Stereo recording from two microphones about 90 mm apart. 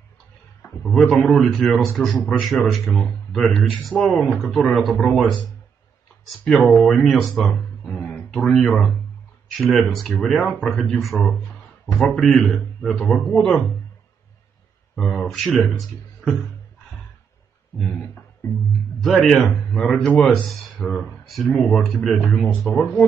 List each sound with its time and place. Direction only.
0.8 s speech: 5° left (ahead or behind)
15.0 s speech: 5° left (ahead or behind)
17.7 s speech: 5° left (ahead or behind)
20.1 s speech: 15° left (ahead or behind)
20.4 s speech: centre (ahead or behind)